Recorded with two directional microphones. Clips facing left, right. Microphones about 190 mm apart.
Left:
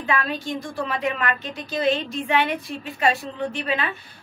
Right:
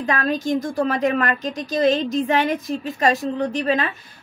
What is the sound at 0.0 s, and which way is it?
Speech, 40° right (ahead or behind).